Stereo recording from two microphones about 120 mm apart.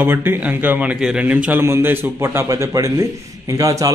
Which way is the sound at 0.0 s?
20° right (ahead or behind).